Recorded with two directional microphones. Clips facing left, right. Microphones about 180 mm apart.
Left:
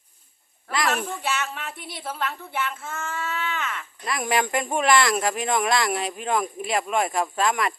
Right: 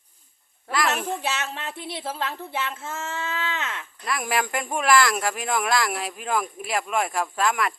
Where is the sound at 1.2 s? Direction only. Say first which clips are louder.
Left 1 dB; 25° right (ahead or behind).